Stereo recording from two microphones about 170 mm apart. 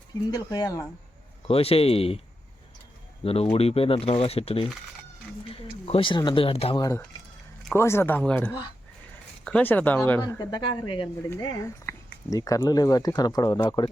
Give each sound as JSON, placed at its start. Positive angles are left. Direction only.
{"t": 0.3, "sound": "speech", "side_deg": 25}
{"t": 1.5, "sound": "speech", "side_deg": 35}
{"t": 3.5, "sound": "speech", "side_deg": 35}
{"t": 7.7, "sound": "speech", "side_deg": 15}